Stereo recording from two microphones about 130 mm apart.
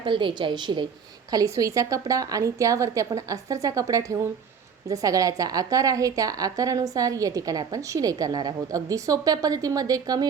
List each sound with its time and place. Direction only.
0.0 s a woman's voice: 40° right (ahead or behind)